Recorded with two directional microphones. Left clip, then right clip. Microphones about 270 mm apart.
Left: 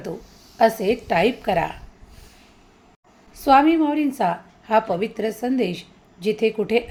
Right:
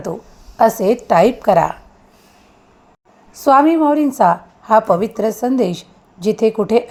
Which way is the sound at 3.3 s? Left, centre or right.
Right.